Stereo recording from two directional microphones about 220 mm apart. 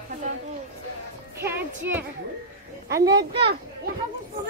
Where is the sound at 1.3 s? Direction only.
10° right (ahead or behind).